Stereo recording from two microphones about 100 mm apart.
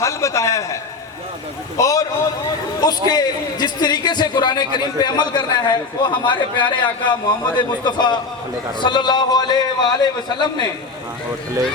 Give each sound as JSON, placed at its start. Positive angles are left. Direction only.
{"t": 0.0, "sound": "a man's voice", "side_deg": 30}
{"t": 1.8, "sound": "a man's voice", "side_deg": 35}